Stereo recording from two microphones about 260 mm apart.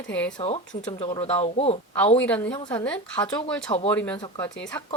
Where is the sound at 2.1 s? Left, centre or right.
Centre.